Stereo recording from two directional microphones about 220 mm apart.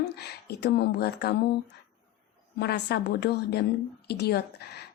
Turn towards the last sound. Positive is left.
turn(degrees=45)  # may be behind; listen again after turning